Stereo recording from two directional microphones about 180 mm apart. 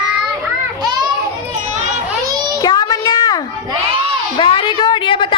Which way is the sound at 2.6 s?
20° left (ahead or behind).